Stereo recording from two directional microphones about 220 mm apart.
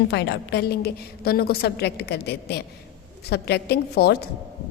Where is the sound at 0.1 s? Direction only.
55° left (ahead or behind).